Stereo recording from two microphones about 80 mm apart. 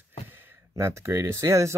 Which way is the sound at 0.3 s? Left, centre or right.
Right.